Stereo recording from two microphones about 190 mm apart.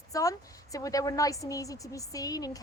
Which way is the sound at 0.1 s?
15° left (ahead or behind).